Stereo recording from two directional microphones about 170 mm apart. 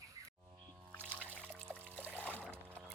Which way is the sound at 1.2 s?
10° right (ahead or behind).